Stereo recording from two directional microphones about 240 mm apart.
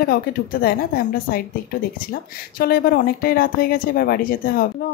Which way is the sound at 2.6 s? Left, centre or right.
Left.